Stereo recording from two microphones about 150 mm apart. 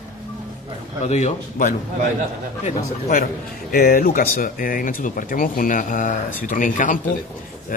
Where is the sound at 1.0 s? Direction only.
50° left (ahead or behind).